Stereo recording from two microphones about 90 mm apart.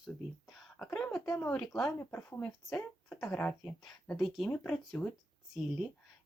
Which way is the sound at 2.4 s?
10° left (ahead or behind).